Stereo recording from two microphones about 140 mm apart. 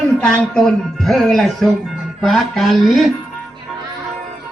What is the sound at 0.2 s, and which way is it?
Speech, 5° left (ahead or behind).